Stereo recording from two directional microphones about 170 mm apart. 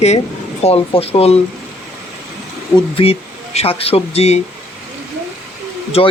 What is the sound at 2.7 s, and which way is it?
Speech, 35° left (ahead or behind).